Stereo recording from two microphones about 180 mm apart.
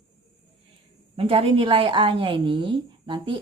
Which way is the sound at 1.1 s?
30° right (ahead or behind).